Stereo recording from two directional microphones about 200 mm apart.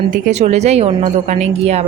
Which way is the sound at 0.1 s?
35° right (ahead or behind).